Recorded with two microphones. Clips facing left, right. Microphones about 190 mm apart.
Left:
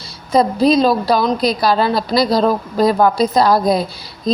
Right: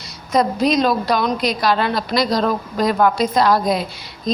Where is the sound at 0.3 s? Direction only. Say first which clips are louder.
Left 4 dB; 30° left (ahead or behind).